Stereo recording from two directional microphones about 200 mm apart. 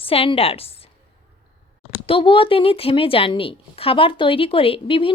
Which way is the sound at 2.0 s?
25° left (ahead or behind).